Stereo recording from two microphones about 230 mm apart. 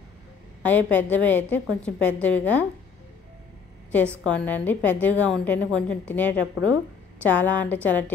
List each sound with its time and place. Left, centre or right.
0.6 s a woman's voice: centre
4.2 s a woman's voice: centre